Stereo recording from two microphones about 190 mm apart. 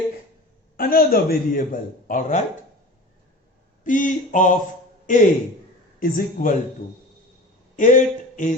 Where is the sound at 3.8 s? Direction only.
45° left (ahead or behind).